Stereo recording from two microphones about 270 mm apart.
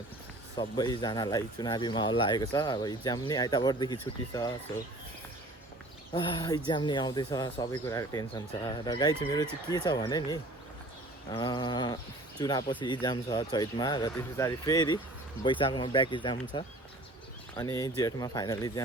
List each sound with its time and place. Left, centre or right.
0.5 s speech: centre
6.1 s speech: centre